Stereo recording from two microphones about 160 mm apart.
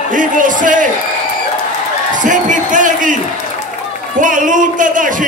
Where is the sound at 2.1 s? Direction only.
50° right (ahead or behind).